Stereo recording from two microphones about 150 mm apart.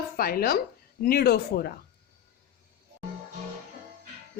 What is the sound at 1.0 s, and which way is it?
Speech, 90° left.